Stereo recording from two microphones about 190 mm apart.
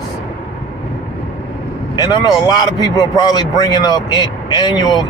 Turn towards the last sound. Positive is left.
turn(degrees=20)  # may be behind; listen again after turning